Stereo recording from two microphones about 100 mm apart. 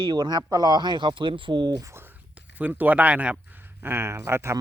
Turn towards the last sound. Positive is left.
turn(degrees=-25)  # may be behind; listen again after turning